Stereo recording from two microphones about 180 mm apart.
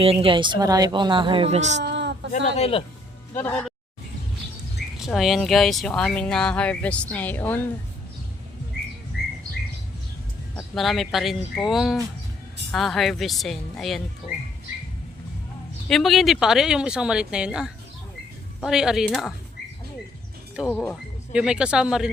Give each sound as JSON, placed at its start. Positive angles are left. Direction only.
{"t": 0.0, "sound": "speech", "side_deg": -30}
{"t": 1.8, "sound": "a sound", "side_deg": -75}
{"t": 2.6, "sound": "a man's voice", "side_deg": 30}
{"t": 3.3, "sound": "speech", "side_deg": 10}
{"t": 4.9, "sound": "speech", "side_deg": 0}
{"t": 10.6, "sound": "speech", "side_deg": 0}
{"t": 15.9, "sound": "speech", "side_deg": 0}
{"t": 20.7, "sound": "speech", "side_deg": 5}